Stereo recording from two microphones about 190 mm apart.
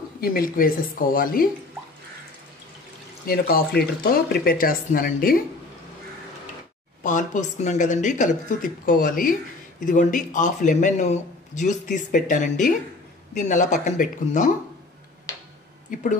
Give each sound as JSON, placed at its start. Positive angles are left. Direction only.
{"t": 0.2, "sound": "speech", "side_deg": 50}
{"t": 3.3, "sound": "speech", "side_deg": 50}
{"t": 7.0, "sound": "a man's voice", "side_deg": 40}